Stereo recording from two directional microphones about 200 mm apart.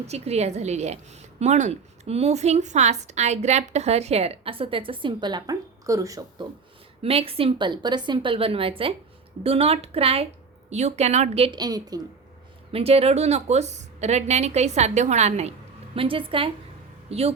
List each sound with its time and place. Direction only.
0.1 s a woman's voice: 30° right (ahead or behind); by 6.2 s 15° right (ahead or behind)
7.0 s a woman's voice: 30° right (ahead or behind)
12.7 s a woman's voice: 30° right (ahead or behind)